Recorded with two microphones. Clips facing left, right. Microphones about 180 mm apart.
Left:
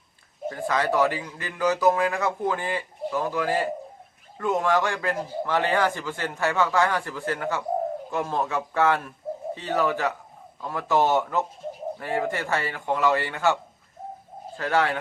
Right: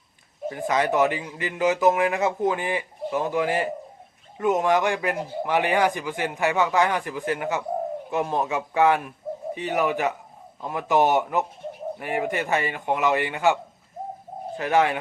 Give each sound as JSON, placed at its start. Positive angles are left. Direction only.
{"t": 0.4, "sound": "a man's voice", "side_deg": -15}